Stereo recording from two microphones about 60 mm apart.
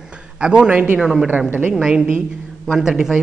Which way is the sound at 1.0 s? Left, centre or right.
Centre.